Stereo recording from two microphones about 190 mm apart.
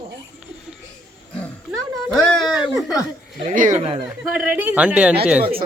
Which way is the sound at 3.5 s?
45° right (ahead or behind).